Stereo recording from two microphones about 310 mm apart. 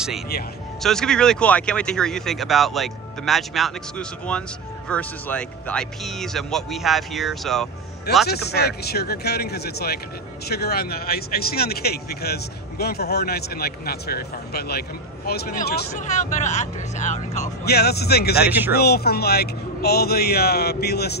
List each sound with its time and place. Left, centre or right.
0.8 s speech: centre
8.3 s speech: left